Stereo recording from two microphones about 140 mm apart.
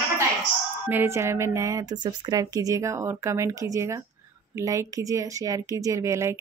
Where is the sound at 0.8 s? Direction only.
15° right (ahead or behind).